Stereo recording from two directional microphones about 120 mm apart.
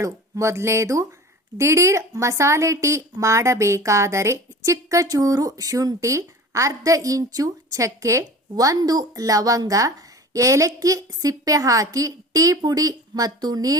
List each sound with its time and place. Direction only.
0.0 s a woman's voice: 25° right (ahead or behind)